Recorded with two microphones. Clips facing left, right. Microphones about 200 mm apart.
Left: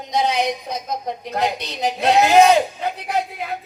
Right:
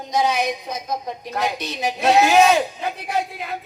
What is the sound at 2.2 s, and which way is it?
Speech, 20° left (ahead or behind).